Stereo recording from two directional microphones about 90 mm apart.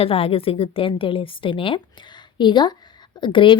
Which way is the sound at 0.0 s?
90° left.